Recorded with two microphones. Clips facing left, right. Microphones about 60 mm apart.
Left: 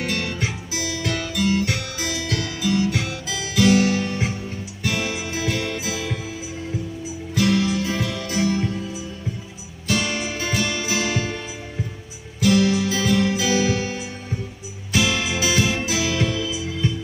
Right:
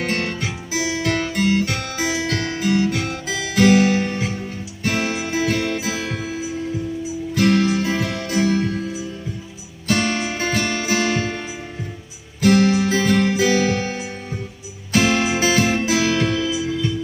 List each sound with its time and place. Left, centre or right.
0.0 s music: right
0.7 s music: right
12.4 s music: right